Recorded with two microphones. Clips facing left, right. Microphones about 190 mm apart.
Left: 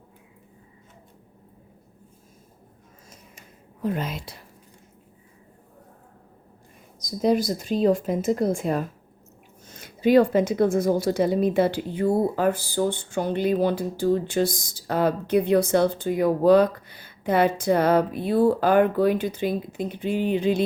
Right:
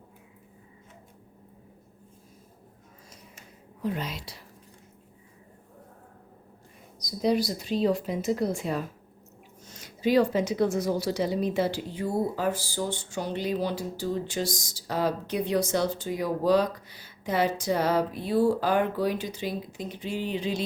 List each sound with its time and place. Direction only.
3.8 s speech: 50° left (ahead or behind)
7.0 s speech: 50° left (ahead or behind)